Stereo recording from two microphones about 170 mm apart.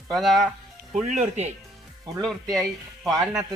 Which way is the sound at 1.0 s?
45° right (ahead or behind).